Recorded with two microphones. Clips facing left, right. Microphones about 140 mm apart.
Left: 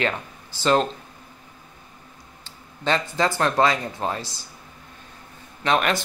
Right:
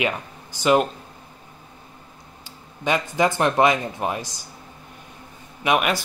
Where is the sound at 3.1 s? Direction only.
15° right (ahead or behind).